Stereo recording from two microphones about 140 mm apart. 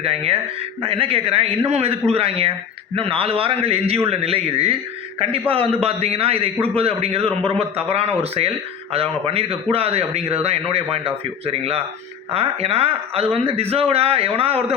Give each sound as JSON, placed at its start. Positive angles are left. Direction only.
{"t": 0.0, "sound": "a man's voice", "side_deg": -45}